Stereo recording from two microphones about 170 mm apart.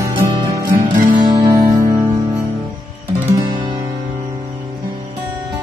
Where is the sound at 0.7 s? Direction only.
50° right (ahead or behind).